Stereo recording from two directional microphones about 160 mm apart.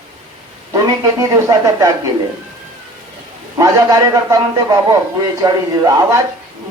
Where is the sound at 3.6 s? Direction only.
20° right (ahead or behind).